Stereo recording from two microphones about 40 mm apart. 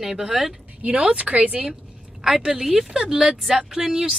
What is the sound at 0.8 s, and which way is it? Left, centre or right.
Speech, right.